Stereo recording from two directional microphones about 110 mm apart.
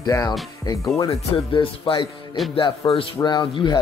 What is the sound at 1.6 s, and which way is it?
Speech, 55° left (ahead or behind).